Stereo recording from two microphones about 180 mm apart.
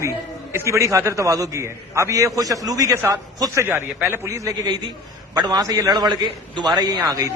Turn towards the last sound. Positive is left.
turn(degrees=-20)  # may be behind; listen again after turning